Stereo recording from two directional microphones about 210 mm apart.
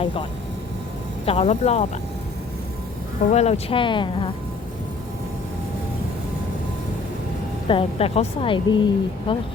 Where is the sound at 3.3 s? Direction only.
30° left (ahead or behind).